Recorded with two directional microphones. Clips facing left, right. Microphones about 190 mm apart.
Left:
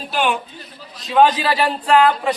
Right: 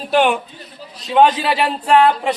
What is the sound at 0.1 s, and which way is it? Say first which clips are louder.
Speech: right 6 dB; 55° right (ahead or behind).